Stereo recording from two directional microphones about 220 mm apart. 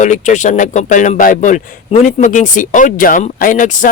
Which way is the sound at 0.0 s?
35° left (ahead or behind).